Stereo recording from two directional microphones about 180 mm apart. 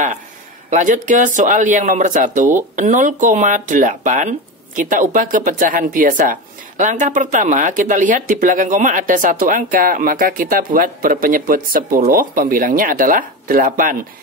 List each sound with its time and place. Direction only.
0.7 s speech: 45° right (ahead or behind)